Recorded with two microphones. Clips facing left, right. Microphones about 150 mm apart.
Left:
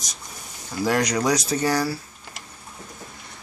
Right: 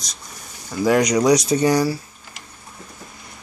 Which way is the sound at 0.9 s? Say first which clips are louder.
Right 6 dB; 15° right (ahead or behind).